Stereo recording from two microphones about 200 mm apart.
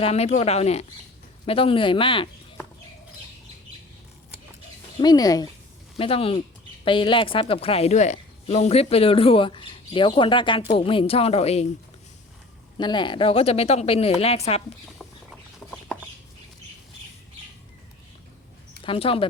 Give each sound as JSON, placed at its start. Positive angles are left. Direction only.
{"t": 0.0, "sound": "speech", "side_deg": 30}
{"t": 4.9, "sound": "speech", "side_deg": 20}
{"t": 12.7, "sound": "speech", "side_deg": 25}
{"t": 18.8, "sound": "speech", "side_deg": 25}